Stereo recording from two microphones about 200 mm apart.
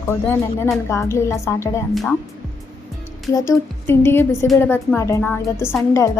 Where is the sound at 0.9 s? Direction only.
15° left (ahead or behind).